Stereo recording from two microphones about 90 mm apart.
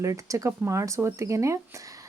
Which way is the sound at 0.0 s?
35° right (ahead or behind).